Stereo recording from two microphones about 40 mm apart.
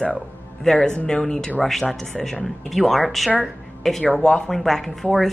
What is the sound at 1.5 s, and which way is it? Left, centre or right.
A woman's voice, centre.